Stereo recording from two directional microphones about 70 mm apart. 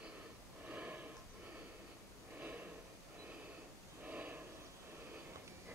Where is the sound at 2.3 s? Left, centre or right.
Right.